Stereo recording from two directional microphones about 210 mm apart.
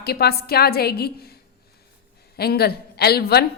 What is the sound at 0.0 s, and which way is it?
A woman's voice, 50° left (ahead or behind).